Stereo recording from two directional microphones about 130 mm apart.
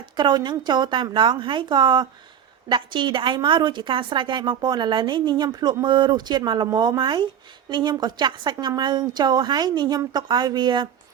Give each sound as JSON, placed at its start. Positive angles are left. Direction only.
{"t": 0.0, "sound": "a woman's voice", "side_deg": -35}